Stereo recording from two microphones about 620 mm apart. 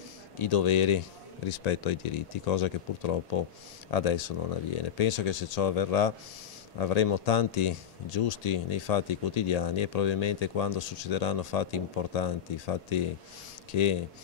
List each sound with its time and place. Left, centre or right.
0.4 s speech: left